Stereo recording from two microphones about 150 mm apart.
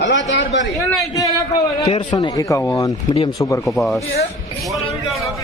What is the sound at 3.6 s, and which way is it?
A man's voice, centre (ahead or behind).